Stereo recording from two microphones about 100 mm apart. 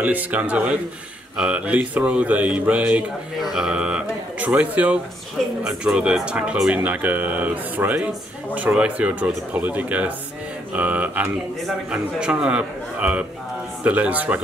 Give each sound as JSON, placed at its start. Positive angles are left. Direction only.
{"t": 0.0, "sound": "speech", "side_deg": -15}